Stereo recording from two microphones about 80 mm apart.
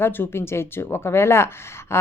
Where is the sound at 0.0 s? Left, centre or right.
Left.